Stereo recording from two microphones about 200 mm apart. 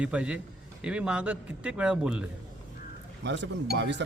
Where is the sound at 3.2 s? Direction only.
60° right (ahead or behind).